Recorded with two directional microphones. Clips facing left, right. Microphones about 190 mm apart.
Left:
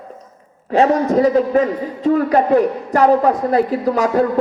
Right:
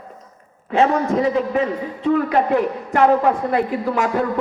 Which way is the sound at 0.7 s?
35° left (ahead or behind).